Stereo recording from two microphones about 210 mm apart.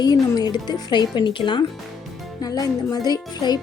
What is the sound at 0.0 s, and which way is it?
A woman's voice, 20° left (ahead or behind).